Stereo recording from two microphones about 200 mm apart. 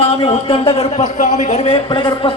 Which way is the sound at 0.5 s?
30° left (ahead or behind).